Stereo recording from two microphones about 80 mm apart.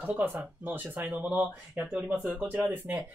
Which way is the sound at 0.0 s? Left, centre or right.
Right.